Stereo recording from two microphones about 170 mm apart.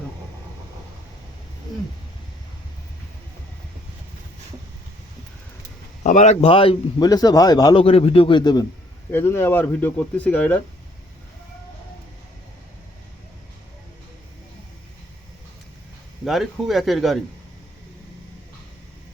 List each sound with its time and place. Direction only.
6.0 s a man's voice: 45° left (ahead or behind); by 8.6 s 25° left (ahead or behind)
9.0 s speech: 15° left (ahead or behind)
16.2 s speech: centre (ahead or behind)